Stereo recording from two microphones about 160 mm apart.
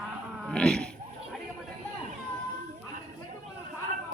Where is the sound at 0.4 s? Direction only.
5° left (ahead or behind).